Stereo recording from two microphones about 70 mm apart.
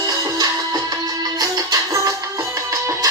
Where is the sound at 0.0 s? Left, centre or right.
Right.